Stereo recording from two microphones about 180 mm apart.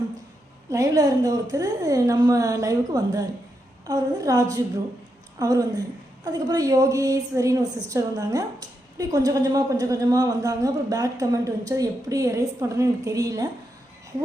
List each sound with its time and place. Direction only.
0.7 s a woman's voice: 20° right (ahead or behind)